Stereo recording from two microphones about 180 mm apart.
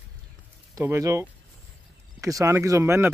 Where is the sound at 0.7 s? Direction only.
15° right (ahead or behind).